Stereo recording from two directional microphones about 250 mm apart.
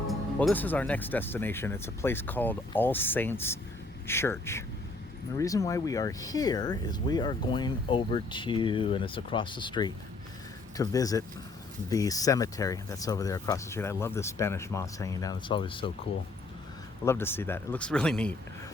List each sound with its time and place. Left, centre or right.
0.1 s speech: centre
17.1 s speech: centre